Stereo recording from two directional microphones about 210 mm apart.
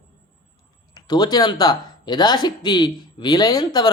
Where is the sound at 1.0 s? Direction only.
20° left (ahead or behind).